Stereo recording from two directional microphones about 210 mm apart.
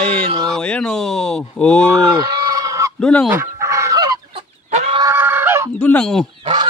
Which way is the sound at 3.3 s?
15° right (ahead or behind).